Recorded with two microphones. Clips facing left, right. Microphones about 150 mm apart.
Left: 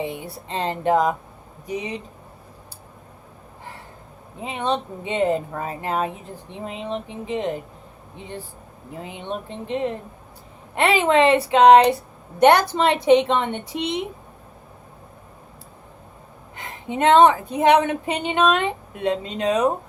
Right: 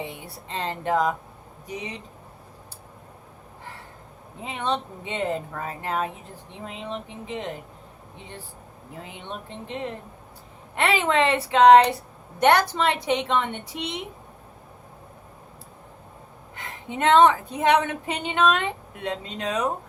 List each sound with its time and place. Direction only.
0.0 s a woman's voice: 20° left (ahead or behind)
4.4 s a woman's voice: 20° left (ahead or behind)
9.0 s a woman's voice: 20° left (ahead or behind)
16.6 s a woman's voice: 20° left (ahead or behind)